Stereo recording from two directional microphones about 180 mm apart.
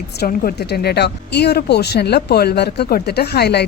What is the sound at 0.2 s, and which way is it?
A woman's voice, 55° left (ahead or behind).